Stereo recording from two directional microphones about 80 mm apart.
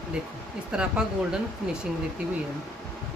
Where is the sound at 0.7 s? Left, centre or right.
Centre.